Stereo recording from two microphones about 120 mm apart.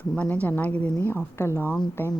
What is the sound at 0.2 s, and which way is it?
A woman's voice, 15° left (ahead or behind).